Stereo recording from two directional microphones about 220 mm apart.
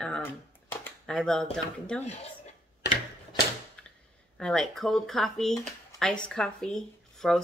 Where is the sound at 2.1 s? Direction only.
30° left (ahead or behind).